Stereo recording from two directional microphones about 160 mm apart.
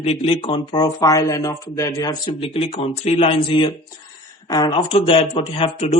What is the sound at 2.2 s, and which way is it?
Speech, 35° left (ahead or behind).